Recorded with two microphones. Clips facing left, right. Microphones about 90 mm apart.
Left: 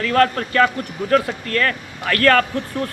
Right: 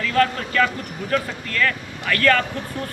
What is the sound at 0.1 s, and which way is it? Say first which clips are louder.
A man's voice: left 3 dB; 45° left (ahead or behind).